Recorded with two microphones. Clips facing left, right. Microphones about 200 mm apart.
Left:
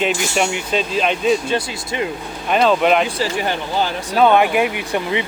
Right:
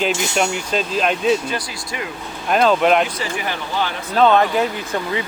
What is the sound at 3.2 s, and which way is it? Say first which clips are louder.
Speech: left 4 dB; 30° left (ahead or behind).